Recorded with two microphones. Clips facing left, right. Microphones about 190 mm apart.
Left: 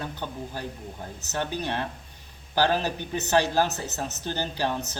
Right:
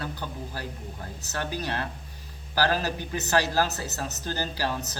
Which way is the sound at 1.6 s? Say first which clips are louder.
Left 2 dB; 20° left (ahead or behind).